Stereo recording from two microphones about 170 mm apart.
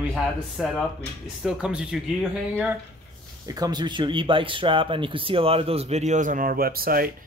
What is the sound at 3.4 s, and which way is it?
Speech, 20° right (ahead or behind).